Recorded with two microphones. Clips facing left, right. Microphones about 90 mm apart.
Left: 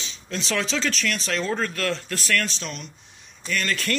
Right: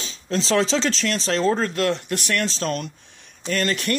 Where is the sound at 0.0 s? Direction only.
35° right (ahead or behind); by 2.1 s 20° right (ahead or behind).